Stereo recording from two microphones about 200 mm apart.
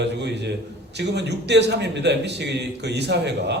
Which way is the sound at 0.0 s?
60° right (ahead or behind).